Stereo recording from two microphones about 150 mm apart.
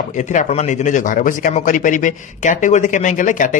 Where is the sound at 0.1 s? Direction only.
55° left (ahead or behind).